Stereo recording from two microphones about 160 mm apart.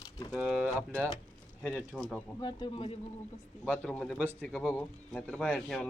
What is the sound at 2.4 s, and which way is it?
Speech, 25° left (ahead or behind).